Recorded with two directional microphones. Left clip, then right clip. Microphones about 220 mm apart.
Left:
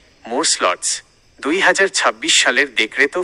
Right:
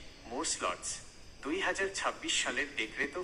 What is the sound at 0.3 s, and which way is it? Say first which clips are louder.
Speech: left 18 dB; 45° left (ahead or behind).